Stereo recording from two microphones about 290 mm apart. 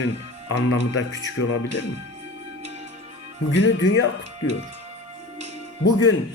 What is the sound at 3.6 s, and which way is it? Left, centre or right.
Speech, left.